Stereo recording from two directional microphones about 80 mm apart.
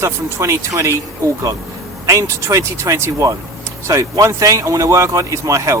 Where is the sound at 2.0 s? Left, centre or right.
Right.